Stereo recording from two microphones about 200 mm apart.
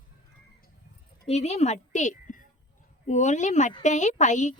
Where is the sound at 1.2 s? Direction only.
30° left (ahead or behind).